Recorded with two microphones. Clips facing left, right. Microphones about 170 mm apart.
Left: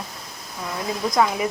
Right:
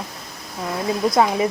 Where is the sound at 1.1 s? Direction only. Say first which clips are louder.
Right 2 dB; 25° right (ahead or behind).